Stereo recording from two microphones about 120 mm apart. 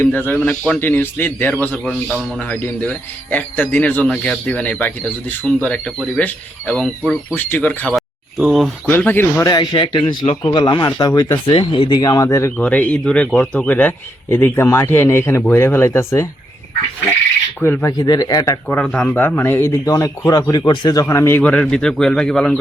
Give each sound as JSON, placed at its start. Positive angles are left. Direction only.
{"t": 0.0, "sound": "a man's voice", "side_deg": 15}
{"t": 1.7, "sound": "a man's voice", "side_deg": 5}
{"t": 2.4, "sound": "a man's voice", "side_deg": 15}
{"t": 7.9, "sound": "a sound", "side_deg": 0}
{"t": 8.9, "sound": "a man's voice", "side_deg": 15}
{"t": 9.5, "sound": "a man's voice", "side_deg": 40}
{"t": 11.4, "sound": "a man's voice", "side_deg": 45}
{"t": 12.6, "sound": "a man's voice", "side_deg": 10}
{"t": 17.6, "sound": "speech", "side_deg": 20}
{"t": 17.9, "sound": "a man's voice", "side_deg": 30}
{"t": 18.7, "sound": "a man's voice", "side_deg": 10}